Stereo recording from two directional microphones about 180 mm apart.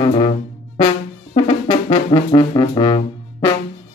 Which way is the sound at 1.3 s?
30° left (ahead or behind).